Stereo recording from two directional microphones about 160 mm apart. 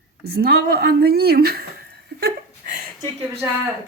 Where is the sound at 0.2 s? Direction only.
75° right (ahead or behind).